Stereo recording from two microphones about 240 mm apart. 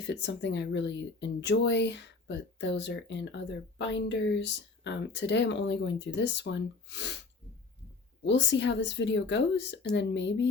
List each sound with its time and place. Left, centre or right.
0.1 s speech: left
8.2 s speech: left